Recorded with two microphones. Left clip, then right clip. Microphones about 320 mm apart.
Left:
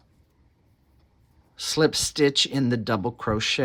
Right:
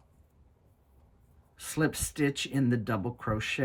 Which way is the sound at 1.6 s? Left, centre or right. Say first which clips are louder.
Left 9 dB; centre.